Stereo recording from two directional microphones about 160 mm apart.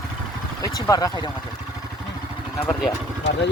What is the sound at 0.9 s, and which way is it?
Speech, 25° left (ahead or behind).